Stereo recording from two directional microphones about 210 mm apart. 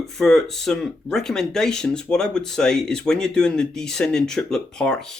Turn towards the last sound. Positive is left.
turn(degrees=5)  # may be behind; listen again after turning